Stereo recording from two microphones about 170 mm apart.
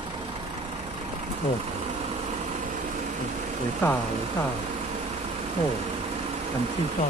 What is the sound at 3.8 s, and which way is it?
Speech, 10° left (ahead or behind).